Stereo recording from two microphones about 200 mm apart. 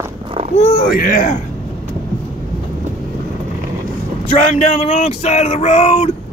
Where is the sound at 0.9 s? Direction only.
45° left (ahead or behind).